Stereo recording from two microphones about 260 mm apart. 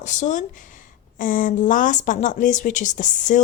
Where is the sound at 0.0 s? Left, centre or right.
Left.